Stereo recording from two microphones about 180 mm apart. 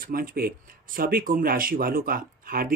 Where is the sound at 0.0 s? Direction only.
55° right (ahead or behind).